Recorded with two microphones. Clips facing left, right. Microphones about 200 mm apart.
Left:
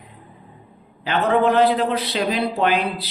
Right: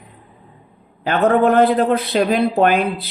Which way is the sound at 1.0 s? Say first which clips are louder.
Right 4 dB; 50° right (ahead or behind).